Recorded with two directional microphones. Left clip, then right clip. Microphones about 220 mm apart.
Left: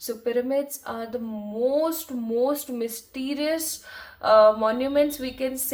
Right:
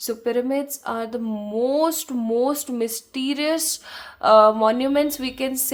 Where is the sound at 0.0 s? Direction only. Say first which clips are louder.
Right 3 dB; 40° right (ahead or behind).